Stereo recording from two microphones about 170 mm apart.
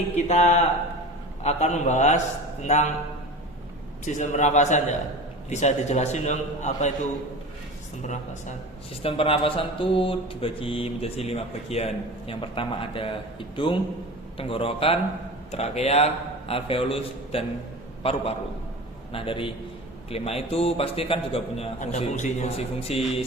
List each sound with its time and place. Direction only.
0.2 s a man's voice: 45° left (ahead or behind)
4.0 s a man's voice: 45° left (ahead or behind)
8.0 s a man's voice: 45° left (ahead or behind)
9.0 s a man's voice: 35° left (ahead or behind)